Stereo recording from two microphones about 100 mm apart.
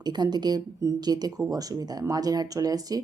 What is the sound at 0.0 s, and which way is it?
A woman's voice, 45° right (ahead or behind).